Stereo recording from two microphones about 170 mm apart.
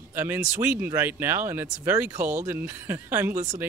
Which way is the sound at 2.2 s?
45° right (ahead or behind).